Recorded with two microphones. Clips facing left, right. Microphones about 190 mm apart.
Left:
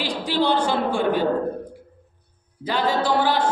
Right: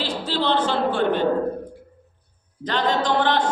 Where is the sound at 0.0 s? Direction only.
15° left (ahead or behind).